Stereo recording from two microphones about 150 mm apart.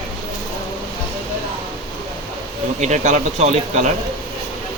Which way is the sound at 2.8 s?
50° right (ahead or behind).